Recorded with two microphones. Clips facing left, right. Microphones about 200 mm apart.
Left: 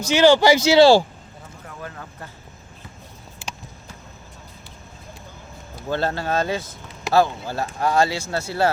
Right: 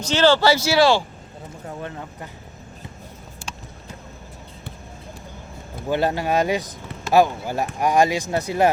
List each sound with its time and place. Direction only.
0.0 s speech: 10° left (ahead or behind)
1.6 s speech: 25° right (ahead or behind)
5.9 s speech: 15° right (ahead or behind)